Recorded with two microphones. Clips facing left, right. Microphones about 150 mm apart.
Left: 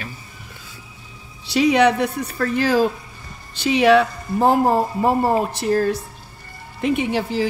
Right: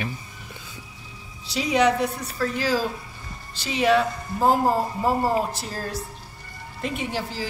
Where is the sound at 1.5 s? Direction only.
65° left (ahead or behind).